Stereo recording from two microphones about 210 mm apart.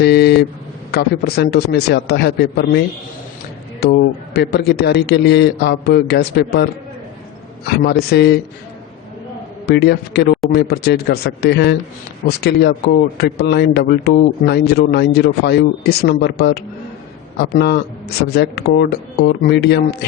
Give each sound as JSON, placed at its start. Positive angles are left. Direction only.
{"t": 0.0, "sound": "a sound", "side_deg": 50}
{"t": 0.9, "sound": "speech", "side_deg": 50}
{"t": 3.8, "sound": "speech", "side_deg": 50}
{"t": 7.9, "sound": "speech", "side_deg": 50}
{"t": 9.6, "sound": "speech", "side_deg": 50}